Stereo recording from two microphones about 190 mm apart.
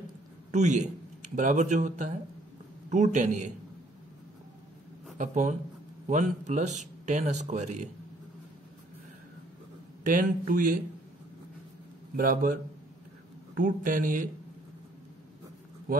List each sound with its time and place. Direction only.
0.5 s speech: 40° right (ahead or behind)
5.1 s speech: 40° right (ahead or behind)
10.1 s speech: 45° right (ahead or behind)
12.2 s speech: 45° right (ahead or behind)
13.6 s speech: 45° right (ahead or behind)